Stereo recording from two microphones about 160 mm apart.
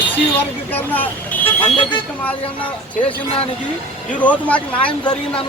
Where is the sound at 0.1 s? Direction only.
10° left (ahead or behind).